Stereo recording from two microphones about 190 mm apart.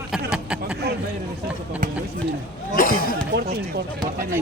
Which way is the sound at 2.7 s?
50° left (ahead or behind).